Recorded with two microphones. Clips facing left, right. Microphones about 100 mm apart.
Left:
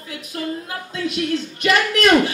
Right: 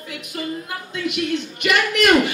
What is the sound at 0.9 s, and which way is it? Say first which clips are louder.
Speech: left 1 dB; 35° left (ahead or behind).